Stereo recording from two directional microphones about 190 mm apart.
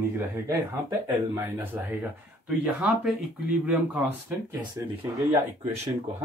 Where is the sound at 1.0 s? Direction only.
10° right (ahead or behind).